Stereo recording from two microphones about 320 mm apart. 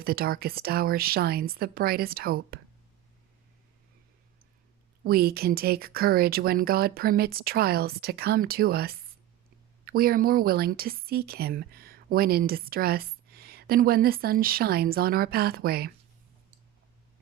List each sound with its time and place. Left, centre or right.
0.0 s a woman's voice: right
5.0 s a woman's voice: right